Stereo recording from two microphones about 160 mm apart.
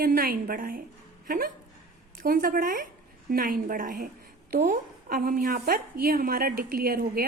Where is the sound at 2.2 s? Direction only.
65° right (ahead or behind).